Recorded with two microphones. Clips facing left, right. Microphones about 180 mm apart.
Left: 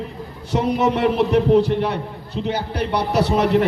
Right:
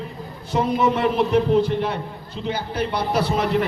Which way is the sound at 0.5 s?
75° left (ahead or behind).